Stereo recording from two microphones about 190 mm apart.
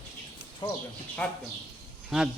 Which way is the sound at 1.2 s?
5° left (ahead or behind).